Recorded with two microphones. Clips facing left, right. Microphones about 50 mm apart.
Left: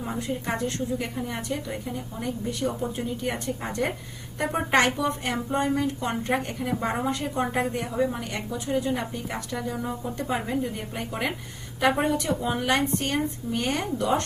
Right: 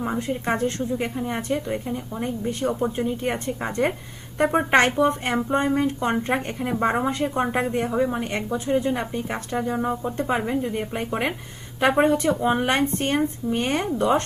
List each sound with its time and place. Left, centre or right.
0.0 s speech: right